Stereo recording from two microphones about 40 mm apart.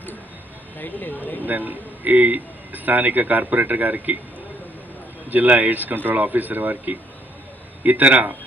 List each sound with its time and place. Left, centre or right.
0.7 s speech: left
1.4 s a man's voice: right
5.3 s a man's voice: right